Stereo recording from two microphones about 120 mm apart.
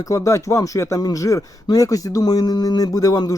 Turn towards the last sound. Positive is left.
turn(degrees=30)  # may be behind; listen again after turning